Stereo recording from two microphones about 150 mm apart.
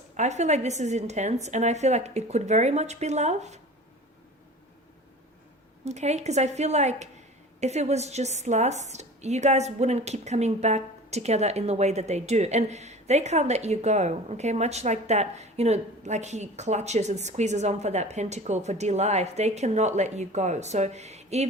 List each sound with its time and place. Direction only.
0.2 s a woman's voice: 50° right (ahead or behind)
5.8 s a woman's voice: 45° right (ahead or behind)